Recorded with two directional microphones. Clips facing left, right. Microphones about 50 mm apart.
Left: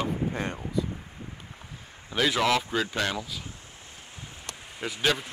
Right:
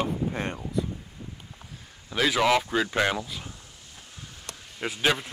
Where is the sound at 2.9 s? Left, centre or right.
Right.